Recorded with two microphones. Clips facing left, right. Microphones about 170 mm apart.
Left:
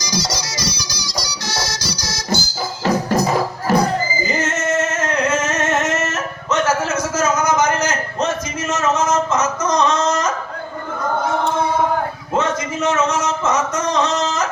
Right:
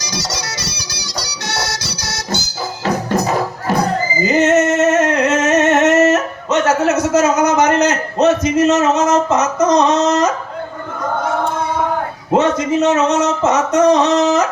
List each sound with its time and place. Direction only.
0.0 s music: 65° right (ahead or behind)
4.3 s singing: 65° right (ahead or behind)
12.3 s speech: 70° right (ahead or behind)